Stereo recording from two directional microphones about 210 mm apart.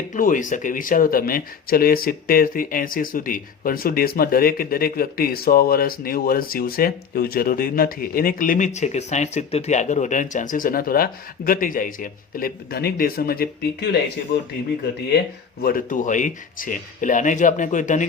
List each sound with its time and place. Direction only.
0.1 s speech: 40° left (ahead or behind)
15.6 s speech: 40° left (ahead or behind)